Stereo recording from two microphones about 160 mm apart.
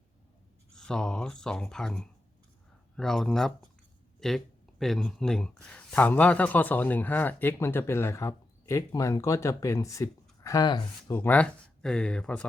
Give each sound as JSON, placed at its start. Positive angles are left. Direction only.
{"t": 0.8, "sound": "a man's voice", "side_deg": 5}
{"t": 11.1, "sound": "a man's voice", "side_deg": 10}